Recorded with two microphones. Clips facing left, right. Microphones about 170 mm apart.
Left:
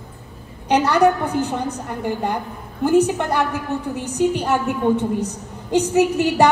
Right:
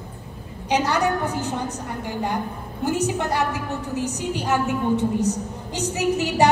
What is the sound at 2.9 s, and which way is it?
A woman's voice, 55° left (ahead or behind).